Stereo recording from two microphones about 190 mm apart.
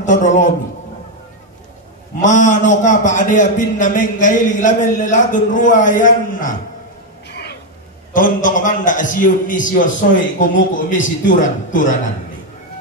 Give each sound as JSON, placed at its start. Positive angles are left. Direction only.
{"t": 0.0, "sound": "a man's voice", "side_deg": 40}
{"t": 2.2, "sound": "a man's voice", "side_deg": 40}
{"t": 8.1, "sound": "a man's voice", "side_deg": 45}